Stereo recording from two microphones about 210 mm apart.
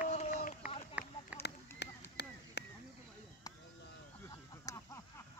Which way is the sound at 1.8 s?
55° left (ahead or behind).